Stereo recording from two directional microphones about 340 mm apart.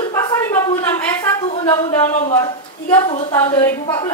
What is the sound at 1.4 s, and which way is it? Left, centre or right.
A woman's voice, centre.